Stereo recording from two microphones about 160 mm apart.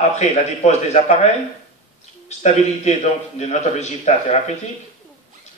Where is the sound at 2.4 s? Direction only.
45° left (ahead or behind).